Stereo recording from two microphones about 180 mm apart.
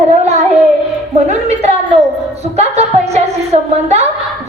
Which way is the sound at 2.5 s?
35° right (ahead or behind).